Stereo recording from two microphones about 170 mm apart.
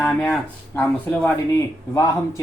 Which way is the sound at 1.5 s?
20° left (ahead or behind).